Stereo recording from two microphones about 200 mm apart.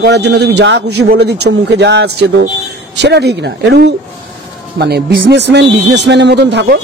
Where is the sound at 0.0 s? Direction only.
55° right (ahead or behind).